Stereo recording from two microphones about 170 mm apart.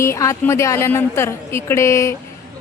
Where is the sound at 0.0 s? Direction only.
15° left (ahead or behind).